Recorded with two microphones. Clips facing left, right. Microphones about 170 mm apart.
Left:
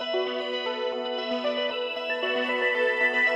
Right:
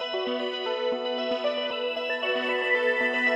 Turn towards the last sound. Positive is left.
turn(degrees=0)  # may be behind; listen again after turning